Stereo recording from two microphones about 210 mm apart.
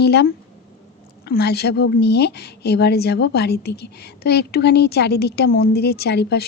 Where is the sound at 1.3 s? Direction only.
50° left (ahead or behind).